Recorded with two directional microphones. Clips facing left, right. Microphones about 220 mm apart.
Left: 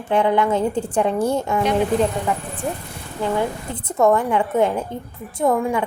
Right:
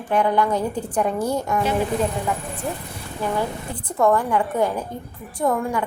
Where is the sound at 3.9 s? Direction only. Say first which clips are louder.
Left 2 dB; 20° left (ahead or behind).